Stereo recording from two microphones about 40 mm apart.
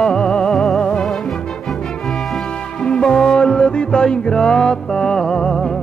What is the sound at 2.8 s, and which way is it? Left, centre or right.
Music, centre.